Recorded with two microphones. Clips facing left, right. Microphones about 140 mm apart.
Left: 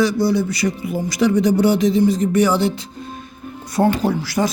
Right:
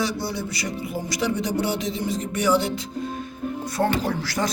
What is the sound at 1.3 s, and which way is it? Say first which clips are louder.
Speech: left 9 dB; 45° left (ahead or behind).